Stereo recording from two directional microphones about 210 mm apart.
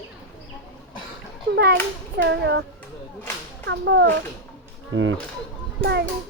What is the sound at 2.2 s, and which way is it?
Speech, 55° right (ahead or behind).